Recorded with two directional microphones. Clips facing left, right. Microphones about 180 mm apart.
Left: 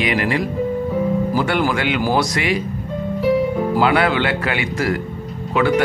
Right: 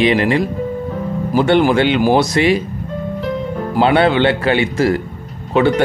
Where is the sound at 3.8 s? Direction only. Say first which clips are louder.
Right 6 dB; 30° right (ahead or behind).